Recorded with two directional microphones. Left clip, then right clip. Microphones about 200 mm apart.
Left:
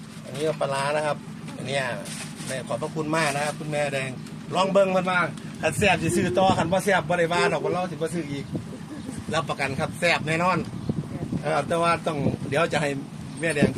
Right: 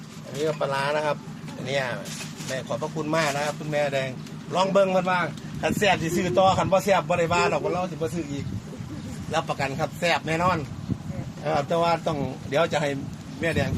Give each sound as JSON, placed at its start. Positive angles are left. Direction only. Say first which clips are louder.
{"t": 0.6, "sound": "a man's voice", "louder": "even", "side_deg": -20}
{"t": 9.3, "sound": "a man's voice", "louder": "even", "side_deg": -10}